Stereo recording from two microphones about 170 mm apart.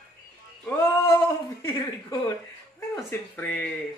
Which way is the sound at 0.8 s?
20° left (ahead or behind).